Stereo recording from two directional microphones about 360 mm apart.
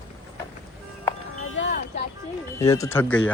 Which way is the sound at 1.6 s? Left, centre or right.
Left.